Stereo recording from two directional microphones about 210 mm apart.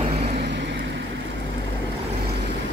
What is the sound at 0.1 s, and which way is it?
Vehicle, 30° right (ahead or behind).